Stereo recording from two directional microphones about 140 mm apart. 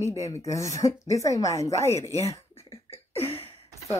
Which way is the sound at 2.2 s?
45° left (ahead or behind).